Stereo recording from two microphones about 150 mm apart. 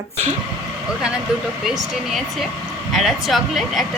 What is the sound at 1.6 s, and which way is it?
Speech, centre (ahead or behind).